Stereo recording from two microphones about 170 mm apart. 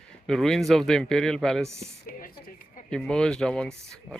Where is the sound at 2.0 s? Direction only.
55° left (ahead or behind).